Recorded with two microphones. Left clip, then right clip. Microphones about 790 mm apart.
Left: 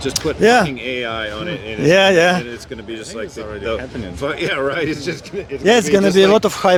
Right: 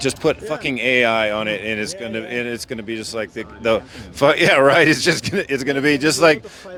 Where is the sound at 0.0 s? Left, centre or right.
Right.